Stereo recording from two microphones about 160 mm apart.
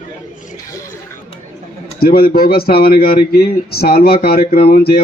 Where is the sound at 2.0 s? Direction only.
70° left (ahead or behind).